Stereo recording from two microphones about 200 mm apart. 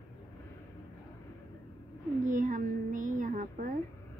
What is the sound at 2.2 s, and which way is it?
Child singing, 40° right (ahead or behind).